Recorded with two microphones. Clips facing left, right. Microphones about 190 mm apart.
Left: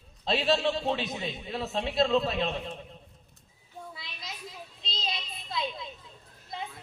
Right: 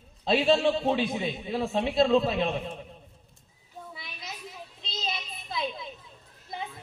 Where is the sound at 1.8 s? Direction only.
25° right (ahead or behind).